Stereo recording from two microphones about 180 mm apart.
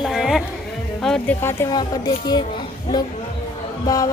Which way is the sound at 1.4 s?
15° left (ahead or behind).